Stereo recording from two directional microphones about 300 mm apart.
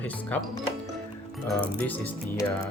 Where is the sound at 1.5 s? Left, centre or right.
Centre.